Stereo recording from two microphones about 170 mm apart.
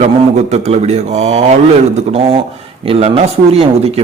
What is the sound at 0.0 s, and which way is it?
Speech, 40° right (ahead or behind).